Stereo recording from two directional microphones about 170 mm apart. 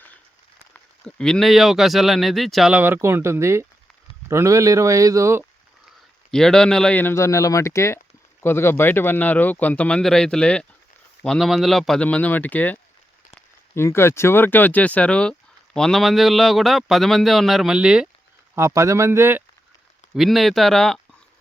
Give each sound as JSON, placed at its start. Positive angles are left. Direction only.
{"t": 0.7, "sound": "a man's voice", "side_deg": 5}
{"t": 6.3, "sound": "speech", "side_deg": 5}
{"t": 18.5, "sound": "speech", "side_deg": -15}
{"t": 20.1, "sound": "speech", "side_deg": 0}